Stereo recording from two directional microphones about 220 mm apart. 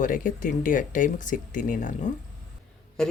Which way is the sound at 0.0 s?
35° left (ahead or behind).